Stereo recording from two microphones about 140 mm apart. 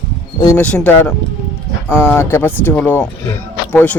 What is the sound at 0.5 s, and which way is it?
Speech, 10° left (ahead or behind).